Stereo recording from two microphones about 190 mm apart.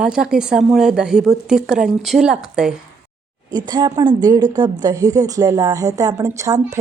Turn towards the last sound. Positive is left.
turn(degrees=-15)  # may be behind; listen again after turning